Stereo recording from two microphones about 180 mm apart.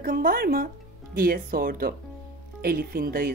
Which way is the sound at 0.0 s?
55° right (ahead or behind).